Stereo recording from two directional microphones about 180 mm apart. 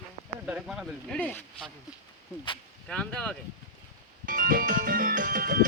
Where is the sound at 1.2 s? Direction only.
10° left (ahead or behind).